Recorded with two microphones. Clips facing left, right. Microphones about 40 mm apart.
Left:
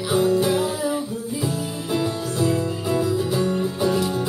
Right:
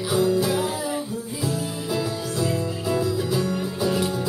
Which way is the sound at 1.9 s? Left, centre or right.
Centre.